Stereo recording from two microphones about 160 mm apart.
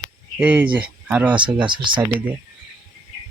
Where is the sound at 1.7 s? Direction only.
30° right (ahead or behind).